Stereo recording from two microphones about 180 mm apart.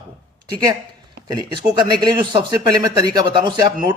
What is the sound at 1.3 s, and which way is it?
Speech, 25° right (ahead or behind).